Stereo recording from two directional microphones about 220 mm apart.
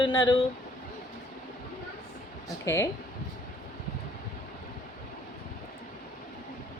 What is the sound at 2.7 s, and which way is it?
Speech, 15° left (ahead or behind).